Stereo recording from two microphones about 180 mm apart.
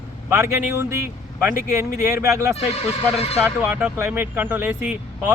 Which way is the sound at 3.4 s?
10° right (ahead or behind).